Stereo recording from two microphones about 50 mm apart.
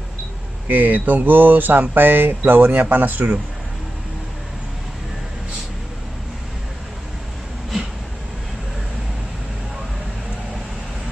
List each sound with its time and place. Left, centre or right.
0.7 s speech: right